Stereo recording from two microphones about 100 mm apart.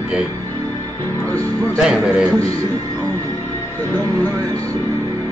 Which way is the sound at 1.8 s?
5° right (ahead or behind).